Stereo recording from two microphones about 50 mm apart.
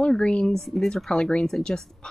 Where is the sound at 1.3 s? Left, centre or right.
Centre.